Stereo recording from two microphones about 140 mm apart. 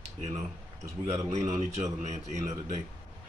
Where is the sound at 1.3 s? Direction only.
55° right (ahead or behind).